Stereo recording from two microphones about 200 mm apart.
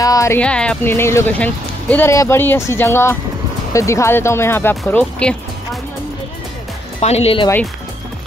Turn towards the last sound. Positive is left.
turn(degrees=30)  # may be behind; listen again after turning